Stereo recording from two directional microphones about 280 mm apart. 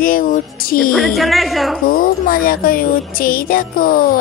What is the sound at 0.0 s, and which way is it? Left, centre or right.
Speech, left.